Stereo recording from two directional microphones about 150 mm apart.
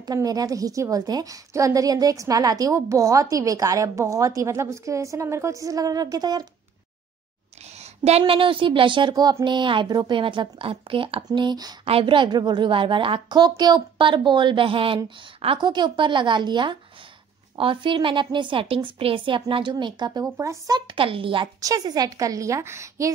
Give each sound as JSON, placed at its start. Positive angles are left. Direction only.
{"t": 0.0, "sound": "a woman's voice", "side_deg": -25}
{"t": 7.8, "sound": "a sound", "side_deg": -45}
{"t": 8.2, "sound": "a woman's voice", "side_deg": -35}
{"t": 21.5, "sound": "a woman's voice", "side_deg": -25}